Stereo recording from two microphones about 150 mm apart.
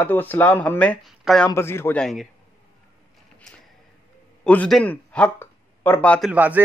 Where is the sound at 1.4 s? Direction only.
15° left (ahead or behind).